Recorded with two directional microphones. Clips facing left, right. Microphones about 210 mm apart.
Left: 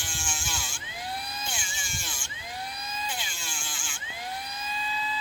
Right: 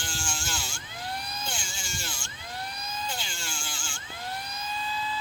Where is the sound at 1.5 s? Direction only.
5° left (ahead or behind).